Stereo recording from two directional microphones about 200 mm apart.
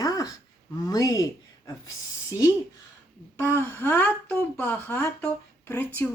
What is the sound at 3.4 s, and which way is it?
Speech, 15° left (ahead or behind).